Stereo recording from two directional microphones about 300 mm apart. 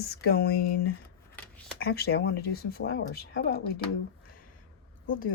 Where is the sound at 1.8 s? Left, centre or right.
Left.